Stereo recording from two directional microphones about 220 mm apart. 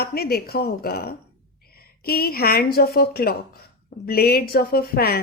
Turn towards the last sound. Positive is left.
turn(degrees=45)  # may be behind; listen again after turning